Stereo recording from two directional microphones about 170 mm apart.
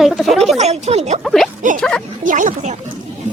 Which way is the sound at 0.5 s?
40° right (ahead or behind).